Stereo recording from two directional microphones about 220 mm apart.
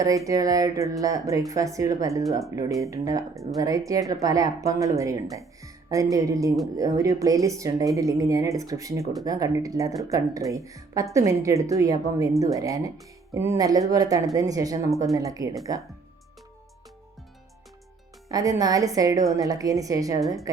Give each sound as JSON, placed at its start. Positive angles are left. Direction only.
{"t": 0.3, "sound": "speech", "side_deg": -15}
{"t": 18.3, "sound": "a woman's voice", "side_deg": -15}